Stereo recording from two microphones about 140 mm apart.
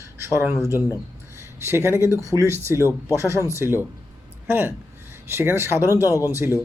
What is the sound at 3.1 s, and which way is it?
Speech, 20° right (ahead or behind).